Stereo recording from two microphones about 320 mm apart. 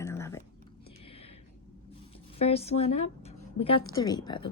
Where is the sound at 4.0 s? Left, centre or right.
Centre.